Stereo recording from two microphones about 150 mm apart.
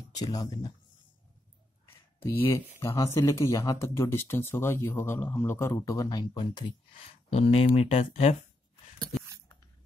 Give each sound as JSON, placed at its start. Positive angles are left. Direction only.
{"t": 0.1, "sound": "speech", "side_deg": 25}
{"t": 2.2, "sound": "speech", "side_deg": 15}